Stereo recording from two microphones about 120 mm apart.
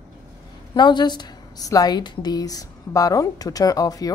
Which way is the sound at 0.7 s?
40° left (ahead or behind).